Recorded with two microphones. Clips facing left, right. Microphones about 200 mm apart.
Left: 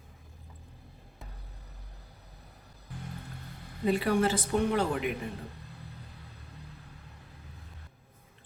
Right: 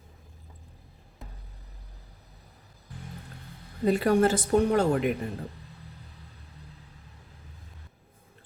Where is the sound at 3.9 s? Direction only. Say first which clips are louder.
Right 4 dB; 45° right (ahead or behind).